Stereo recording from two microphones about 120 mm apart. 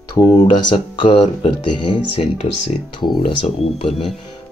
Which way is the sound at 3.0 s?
40° left (ahead or behind).